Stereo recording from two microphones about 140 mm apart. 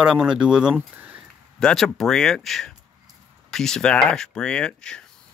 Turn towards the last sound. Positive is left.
turn(degrees=5)  # may be behind; listen again after turning